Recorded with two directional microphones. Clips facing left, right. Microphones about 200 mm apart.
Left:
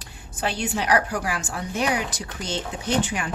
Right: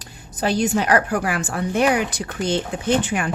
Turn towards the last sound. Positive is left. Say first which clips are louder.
# right 4 dB
turn(degrees=-55)  # may be behind; listen again after turning